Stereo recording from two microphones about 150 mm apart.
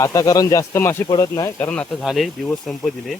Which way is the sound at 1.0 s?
30° left (ahead or behind).